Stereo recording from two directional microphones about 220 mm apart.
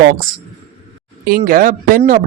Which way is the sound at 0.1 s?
40° right (ahead or behind).